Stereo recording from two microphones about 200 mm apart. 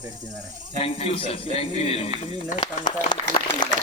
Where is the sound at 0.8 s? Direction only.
30° left (ahead or behind).